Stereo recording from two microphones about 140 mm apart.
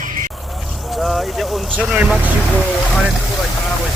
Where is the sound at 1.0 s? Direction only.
Centre (ahead or behind).